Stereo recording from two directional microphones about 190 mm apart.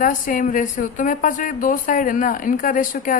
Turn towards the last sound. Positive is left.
turn(degrees=45)  # may be behind; listen again after turning